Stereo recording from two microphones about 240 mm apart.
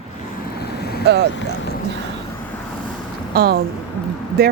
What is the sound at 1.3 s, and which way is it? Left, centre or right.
Speech, left.